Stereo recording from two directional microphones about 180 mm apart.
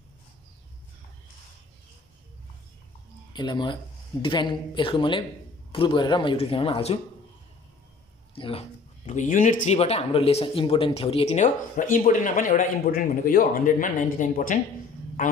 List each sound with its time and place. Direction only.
3.3 s speech: 25° left (ahead or behind)
8.4 s speech: 30° left (ahead or behind)
9.0 s speech: 45° left (ahead or behind)